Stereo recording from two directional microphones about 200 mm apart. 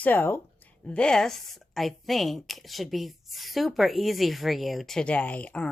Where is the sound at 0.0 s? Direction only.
10° left (ahead or behind).